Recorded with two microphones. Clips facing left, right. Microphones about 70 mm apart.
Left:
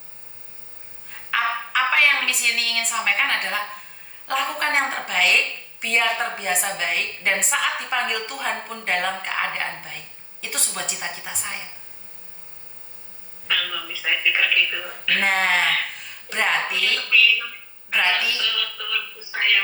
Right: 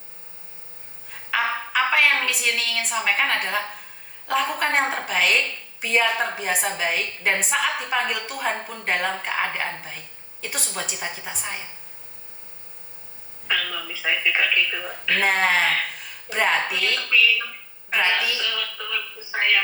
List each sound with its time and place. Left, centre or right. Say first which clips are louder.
1.3 s a sound: left 1 dB; centre
4.3 s a woman's voice: right 1 dB; centre
13.5 s telephone: even; centre
14.0 s a woman's voice: even; centre
17.9 s speech: even; centre